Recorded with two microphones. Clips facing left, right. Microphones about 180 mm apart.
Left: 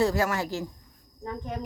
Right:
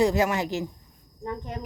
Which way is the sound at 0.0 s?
20° right (ahead or behind).